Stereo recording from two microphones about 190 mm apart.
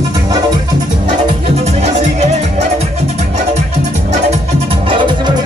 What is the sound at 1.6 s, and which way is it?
Music, 35° right (ahead or behind).